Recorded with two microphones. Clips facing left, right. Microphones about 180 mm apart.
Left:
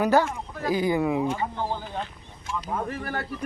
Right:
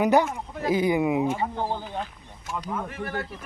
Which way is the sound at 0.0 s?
20° right (ahead or behind).